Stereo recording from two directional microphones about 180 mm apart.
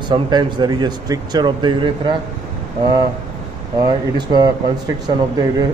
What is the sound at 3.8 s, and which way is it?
Speech, 25° right (ahead or behind).